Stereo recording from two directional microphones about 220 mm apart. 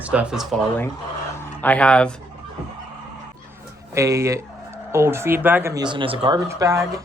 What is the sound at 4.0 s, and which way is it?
Speech, 15° right (ahead or behind).